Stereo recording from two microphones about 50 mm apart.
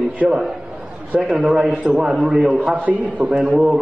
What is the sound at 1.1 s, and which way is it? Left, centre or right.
A man's voice, centre.